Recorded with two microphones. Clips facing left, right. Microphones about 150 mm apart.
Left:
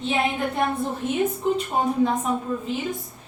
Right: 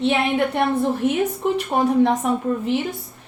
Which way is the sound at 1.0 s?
75° right (ahead or behind).